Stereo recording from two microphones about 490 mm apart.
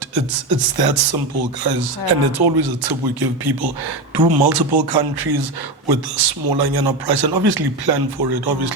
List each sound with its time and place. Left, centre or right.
0.1 s speech: right